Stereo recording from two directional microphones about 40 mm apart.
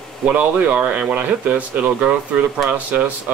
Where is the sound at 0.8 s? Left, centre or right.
Right.